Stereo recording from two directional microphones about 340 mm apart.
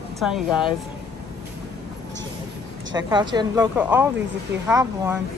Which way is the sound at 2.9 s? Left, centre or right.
Centre.